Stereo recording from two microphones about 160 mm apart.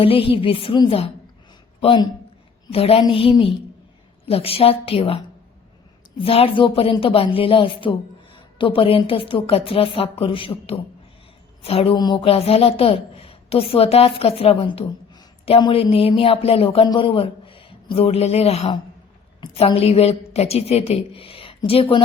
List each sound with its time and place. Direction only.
0.0 s a woman's voice: 35° left (ahead or behind)